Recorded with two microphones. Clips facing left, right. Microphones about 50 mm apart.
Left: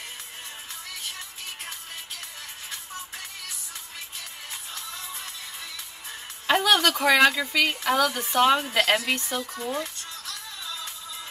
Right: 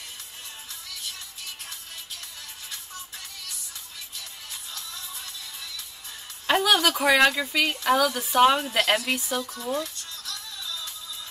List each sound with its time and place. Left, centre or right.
4.7 s music: left
6.4 s a woman's voice: centre
9.4 s music: left